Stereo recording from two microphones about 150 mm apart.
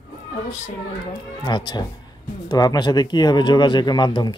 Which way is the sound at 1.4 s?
30° left (ahead or behind).